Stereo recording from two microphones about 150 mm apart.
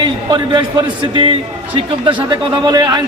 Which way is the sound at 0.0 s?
30° right (ahead or behind).